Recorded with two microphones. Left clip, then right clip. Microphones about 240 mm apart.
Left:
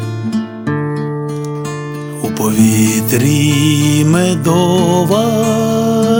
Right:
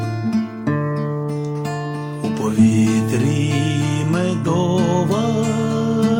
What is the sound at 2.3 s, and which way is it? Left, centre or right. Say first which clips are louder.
Music: left 4 dB; left.